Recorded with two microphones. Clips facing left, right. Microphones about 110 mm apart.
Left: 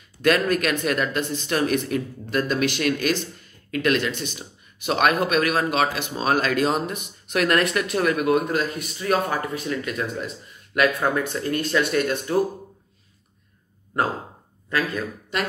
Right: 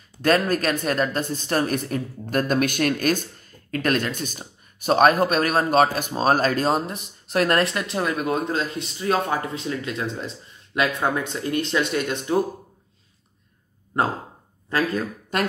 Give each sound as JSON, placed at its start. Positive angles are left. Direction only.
{"t": 0.2, "sound": "speech", "side_deg": -35}
{"t": 14.7, "sound": "speech", "side_deg": -30}